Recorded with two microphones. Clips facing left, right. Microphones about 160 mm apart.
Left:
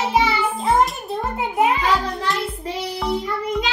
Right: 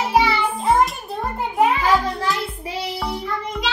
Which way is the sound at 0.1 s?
Centre (ahead or behind).